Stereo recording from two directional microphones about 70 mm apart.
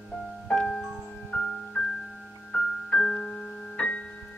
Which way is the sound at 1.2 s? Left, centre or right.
Centre.